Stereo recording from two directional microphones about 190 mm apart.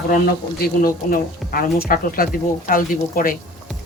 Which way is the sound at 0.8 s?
50° left (ahead or behind).